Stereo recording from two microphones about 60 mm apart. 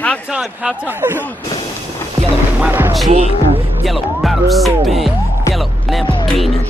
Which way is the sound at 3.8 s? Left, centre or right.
Centre.